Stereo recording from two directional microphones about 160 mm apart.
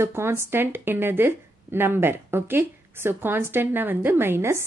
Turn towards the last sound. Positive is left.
turn(degrees=-15)  # may be behind; listen again after turning